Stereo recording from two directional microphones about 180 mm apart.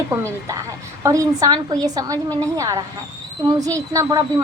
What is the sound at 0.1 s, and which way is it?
A woman's voice, 15° right (ahead or behind).